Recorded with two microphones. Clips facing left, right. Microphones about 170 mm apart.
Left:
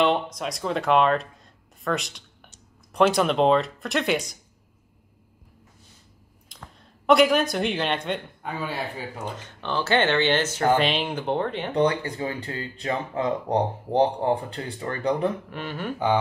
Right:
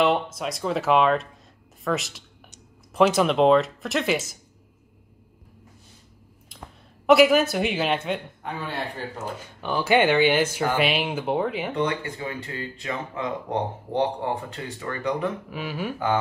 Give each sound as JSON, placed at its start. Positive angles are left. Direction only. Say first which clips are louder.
{"t": 0.0, "sound": "speech", "louder": "even", "side_deg": -5}
{"t": 6.5, "sound": "speech", "louder": "right 2 dB", "side_deg": -5}
{"t": 9.2, "sound": "speech", "louder": "right 1 dB", "side_deg": -10}
{"t": 11.7, "sound": "speech", "louder": "left 4 dB", "side_deg": 35}
{"t": 15.5, "sound": "speech", "louder": "right 2 dB", "side_deg": -5}